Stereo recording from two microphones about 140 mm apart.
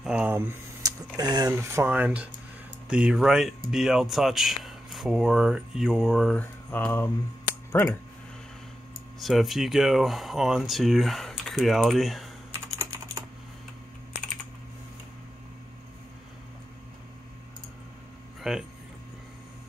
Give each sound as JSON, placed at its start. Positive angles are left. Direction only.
{"t": 0.0, "sound": "a sound", "side_deg": -5}
{"t": 0.3, "sound": "speech", "side_deg": -15}
{"t": 0.8, "sound": "speech", "side_deg": -25}
{"t": 6.3, "sound": "mantra", "side_deg": 10}
{"t": 7.7, "sound": "speech", "side_deg": 15}
{"t": 9.2, "sound": "speech", "side_deg": 0}
{"t": 12.7, "sound": "typing", "side_deg": -20}
{"t": 18.4, "sound": "speech", "side_deg": -5}